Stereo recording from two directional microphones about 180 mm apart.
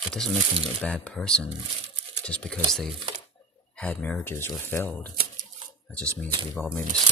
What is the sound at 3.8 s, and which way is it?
Speech, 10° left (ahead or behind).